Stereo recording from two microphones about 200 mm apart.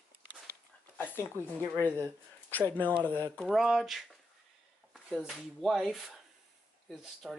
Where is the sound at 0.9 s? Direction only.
10° left (ahead or behind).